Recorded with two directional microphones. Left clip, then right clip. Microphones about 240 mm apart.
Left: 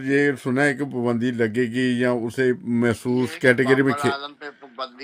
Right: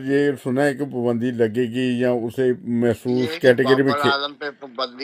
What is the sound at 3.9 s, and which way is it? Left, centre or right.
A man's voice, right.